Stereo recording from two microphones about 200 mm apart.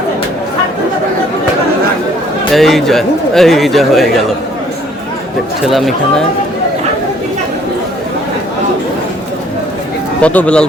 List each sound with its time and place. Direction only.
2.5 s a man's voice: centre (ahead or behind)
5.6 s a man's voice: centre (ahead or behind)
10.2 s a man's voice: 5° left (ahead or behind)